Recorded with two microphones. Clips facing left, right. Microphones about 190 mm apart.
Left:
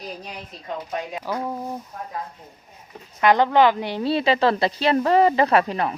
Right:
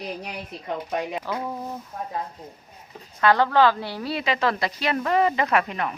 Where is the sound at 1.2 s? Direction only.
10° left (ahead or behind).